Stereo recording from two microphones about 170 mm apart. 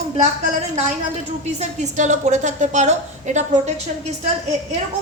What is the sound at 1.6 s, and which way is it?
A woman's voice, 45° right (ahead or behind).